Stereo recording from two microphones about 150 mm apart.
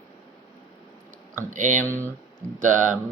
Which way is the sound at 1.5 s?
55° right (ahead or behind).